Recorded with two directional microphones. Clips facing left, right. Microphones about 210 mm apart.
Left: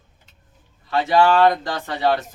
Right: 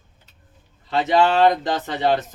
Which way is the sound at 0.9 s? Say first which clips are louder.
Left 1 dB; 20° right (ahead or behind).